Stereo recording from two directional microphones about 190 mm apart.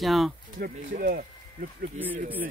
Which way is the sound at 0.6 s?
45° right (ahead or behind).